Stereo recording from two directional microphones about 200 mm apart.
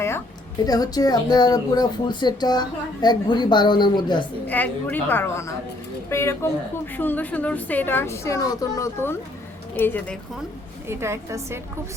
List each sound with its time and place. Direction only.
0.6 s speech: 20° left (ahead or behind)
4.4 s a woman's voice: 10° left (ahead or behind)
10.8 s a woman's voice: 15° right (ahead or behind)